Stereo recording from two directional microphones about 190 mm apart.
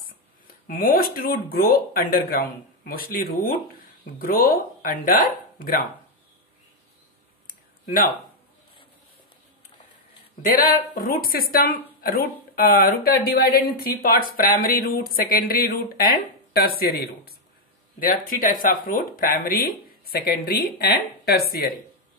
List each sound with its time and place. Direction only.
0.7 s speech: 50° left (ahead or behind)
7.4 s a sound: 50° left (ahead or behind)
10.4 s speech: 50° left (ahead or behind)